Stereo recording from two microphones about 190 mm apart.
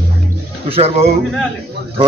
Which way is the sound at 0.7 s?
35° right (ahead or behind).